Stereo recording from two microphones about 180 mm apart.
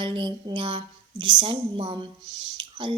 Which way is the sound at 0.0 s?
25° right (ahead or behind).